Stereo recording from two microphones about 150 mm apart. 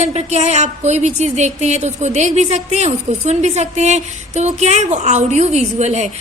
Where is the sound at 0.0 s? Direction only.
45° right (ahead or behind).